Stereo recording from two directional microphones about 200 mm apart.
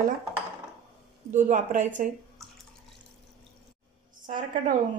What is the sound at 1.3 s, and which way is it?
Speech, 40° right (ahead or behind).